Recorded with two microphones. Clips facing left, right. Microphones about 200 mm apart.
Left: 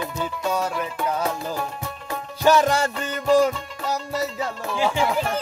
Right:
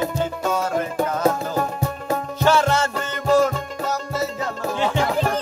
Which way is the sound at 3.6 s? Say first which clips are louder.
Right 2 dB; 45° right (ahead or behind).